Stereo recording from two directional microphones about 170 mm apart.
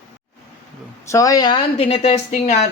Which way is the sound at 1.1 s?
20° left (ahead or behind).